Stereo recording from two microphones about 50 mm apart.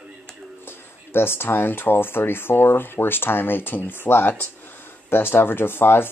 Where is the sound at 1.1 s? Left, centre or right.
Left.